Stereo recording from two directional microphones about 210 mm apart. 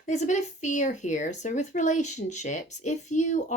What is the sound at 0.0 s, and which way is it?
Speech, 35° left (ahead or behind).